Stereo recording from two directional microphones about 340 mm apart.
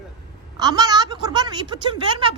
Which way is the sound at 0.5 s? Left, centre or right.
Centre.